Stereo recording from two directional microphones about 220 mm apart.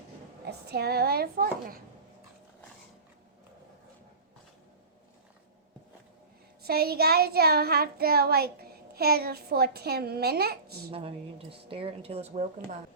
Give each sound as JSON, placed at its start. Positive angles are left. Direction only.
{"t": 0.4, "sound": "speech", "side_deg": -45}
{"t": 6.6, "sound": "a child's voice", "side_deg": -45}
{"t": 10.9, "sound": "a woman's voice", "side_deg": -25}